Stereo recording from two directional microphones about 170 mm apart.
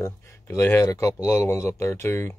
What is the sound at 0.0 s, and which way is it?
Speech, 15° left (ahead or behind).